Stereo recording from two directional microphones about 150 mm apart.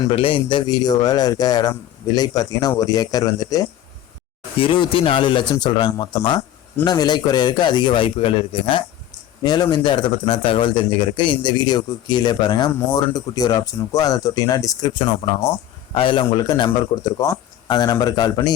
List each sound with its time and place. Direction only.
0.1 s a man's voice: 35° left (ahead or behind)